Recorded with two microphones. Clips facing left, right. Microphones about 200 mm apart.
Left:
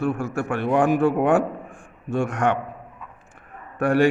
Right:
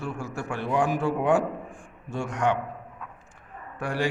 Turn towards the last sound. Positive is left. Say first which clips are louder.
# left 10 dB
turn(degrees=60)  # may be behind; listen again after turning